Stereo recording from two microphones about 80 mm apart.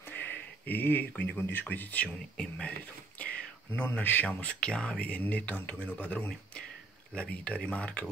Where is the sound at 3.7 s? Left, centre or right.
Left.